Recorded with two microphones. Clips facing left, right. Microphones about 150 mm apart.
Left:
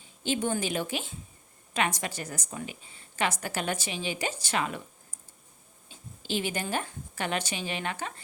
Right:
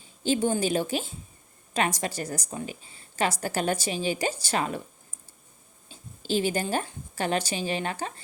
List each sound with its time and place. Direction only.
0.2 s a woman's voice: 35° right (ahead or behind)
5.9 s a woman's voice: 35° right (ahead or behind)